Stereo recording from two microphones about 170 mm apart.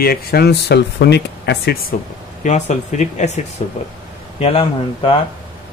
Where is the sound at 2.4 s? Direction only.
45° left (ahead or behind).